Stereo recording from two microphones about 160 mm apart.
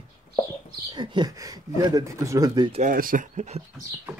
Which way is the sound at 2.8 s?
60° right (ahead or behind).